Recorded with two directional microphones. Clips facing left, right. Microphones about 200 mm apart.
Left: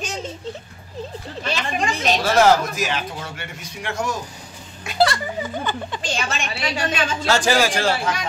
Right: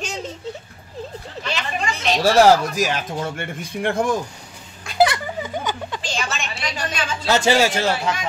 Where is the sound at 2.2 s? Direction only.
40° right (ahead or behind); by 4.2 s 55° right (ahead or behind).